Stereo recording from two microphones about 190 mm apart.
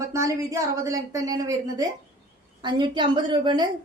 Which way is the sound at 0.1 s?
15° right (ahead or behind).